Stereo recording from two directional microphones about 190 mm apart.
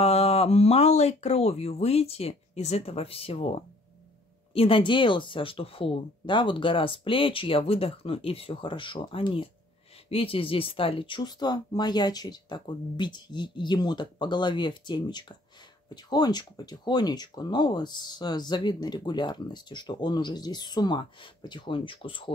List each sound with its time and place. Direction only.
0.0 s speech: 35° left (ahead or behind)
4.6 s speech: 30° left (ahead or behind)